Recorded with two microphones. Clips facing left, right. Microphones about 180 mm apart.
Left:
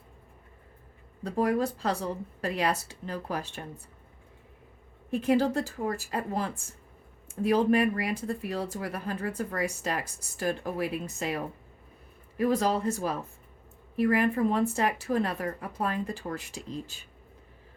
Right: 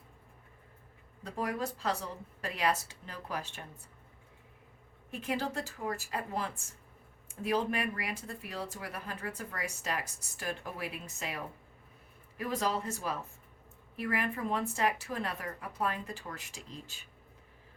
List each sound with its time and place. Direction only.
1.2 s speech: 35° left (ahead or behind)
5.2 s speech: 35° left (ahead or behind)
12.4 s speech: 35° left (ahead or behind)